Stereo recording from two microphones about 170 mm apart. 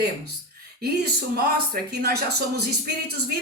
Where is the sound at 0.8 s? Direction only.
65° right (ahead or behind).